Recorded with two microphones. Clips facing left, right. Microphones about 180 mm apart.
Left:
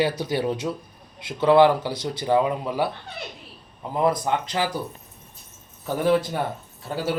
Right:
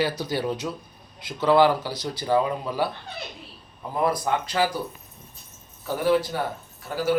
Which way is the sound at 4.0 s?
20° left (ahead or behind).